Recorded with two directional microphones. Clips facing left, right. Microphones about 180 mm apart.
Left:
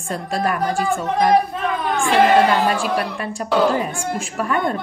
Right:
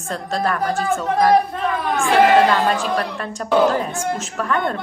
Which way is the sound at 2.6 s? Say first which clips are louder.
Even; 10° left (ahead or behind).